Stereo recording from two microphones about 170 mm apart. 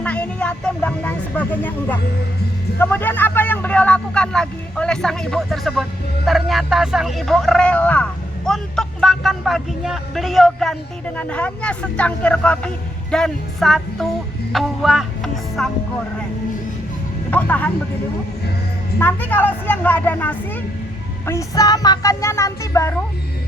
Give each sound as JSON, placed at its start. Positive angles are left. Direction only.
{"t": 0.0, "sound": "speech", "side_deg": 5}
{"t": 14.5, "sound": "music", "side_deg": 0}
{"t": 17.3, "sound": "speech", "side_deg": 10}
{"t": 18.9, "sound": "speech", "side_deg": 10}